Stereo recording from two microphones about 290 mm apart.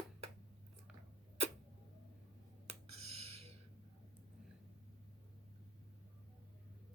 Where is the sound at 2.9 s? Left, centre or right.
Right.